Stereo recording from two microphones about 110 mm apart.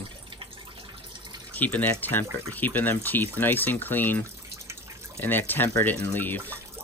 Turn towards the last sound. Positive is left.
turn(degrees=15)  # may be behind; listen again after turning